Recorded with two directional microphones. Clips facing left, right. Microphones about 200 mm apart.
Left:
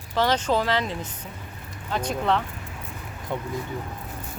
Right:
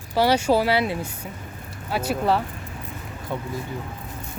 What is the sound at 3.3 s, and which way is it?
Speech, 20° left (ahead or behind).